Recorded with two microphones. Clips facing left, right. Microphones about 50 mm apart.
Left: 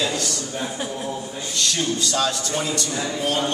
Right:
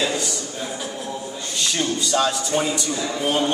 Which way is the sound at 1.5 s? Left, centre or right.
Centre.